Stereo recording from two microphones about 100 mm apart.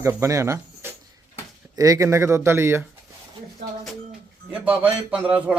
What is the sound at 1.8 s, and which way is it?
A man's voice, 35° right (ahead or behind).